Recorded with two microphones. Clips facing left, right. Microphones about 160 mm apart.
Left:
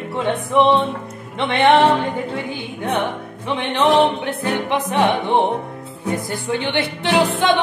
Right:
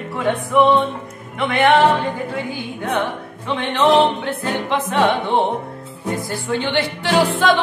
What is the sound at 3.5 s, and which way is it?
Music, 15° left (ahead or behind).